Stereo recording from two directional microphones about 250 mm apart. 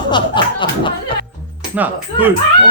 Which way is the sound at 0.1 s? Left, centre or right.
Centre.